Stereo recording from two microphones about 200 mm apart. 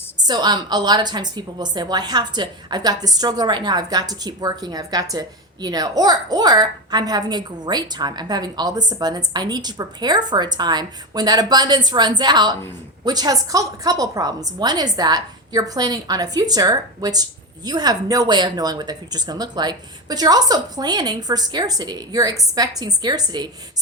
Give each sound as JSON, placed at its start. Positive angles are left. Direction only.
{"t": 0.2, "sound": "a woman's voice", "side_deg": -20}